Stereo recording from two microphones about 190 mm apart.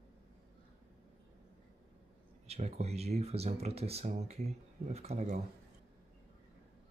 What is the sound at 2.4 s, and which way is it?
Speech, 35° right (ahead or behind).